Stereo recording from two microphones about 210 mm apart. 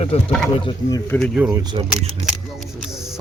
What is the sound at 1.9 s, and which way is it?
Camera, centre (ahead or behind).